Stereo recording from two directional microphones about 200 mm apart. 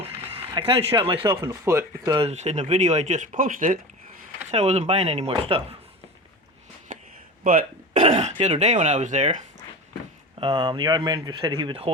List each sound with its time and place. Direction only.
0.0 s a sound: 30° right (ahead or behind)
1.0 s speech: 25° right (ahead or behind)
2.1 s speech: 30° right (ahead or behind)
7.4 s speech: 40° right (ahead or behind)
10.4 s speech: 25° right (ahead or behind)